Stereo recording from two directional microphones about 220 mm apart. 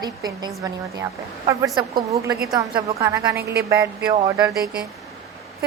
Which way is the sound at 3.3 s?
45° right (ahead or behind).